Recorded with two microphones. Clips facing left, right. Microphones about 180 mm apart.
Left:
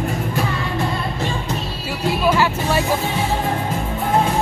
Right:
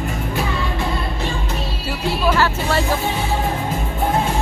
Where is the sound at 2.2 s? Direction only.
15° left (ahead or behind).